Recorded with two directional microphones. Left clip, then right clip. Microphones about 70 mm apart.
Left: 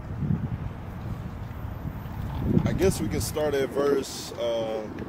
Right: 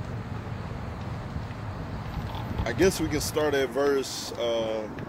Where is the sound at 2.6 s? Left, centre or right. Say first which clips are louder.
Right 3 dB; centre.